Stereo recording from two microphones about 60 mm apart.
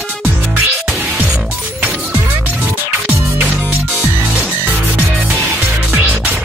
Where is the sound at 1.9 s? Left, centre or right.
Right.